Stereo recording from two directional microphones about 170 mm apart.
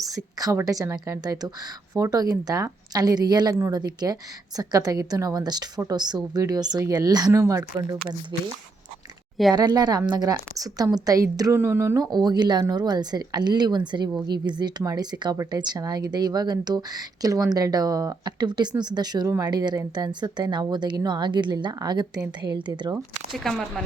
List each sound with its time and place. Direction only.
0.0 s a woman's voice: 20° right (ahead or behind)
9.6 s a woman's voice: 25° right (ahead or behind)
23.3 s speech: centre (ahead or behind)